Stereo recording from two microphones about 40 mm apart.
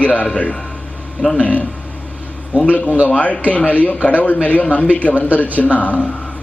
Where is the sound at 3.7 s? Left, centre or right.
Left.